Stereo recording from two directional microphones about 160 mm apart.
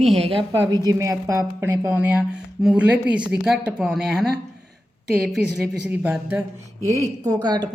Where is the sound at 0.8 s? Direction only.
20° right (ahead or behind); by 4.2 s 5° right (ahead or behind).